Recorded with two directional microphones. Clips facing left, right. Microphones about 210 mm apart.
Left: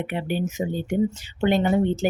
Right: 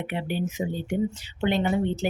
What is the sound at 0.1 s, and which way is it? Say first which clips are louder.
Speech: left 2 dB; 50° left (ahead or behind).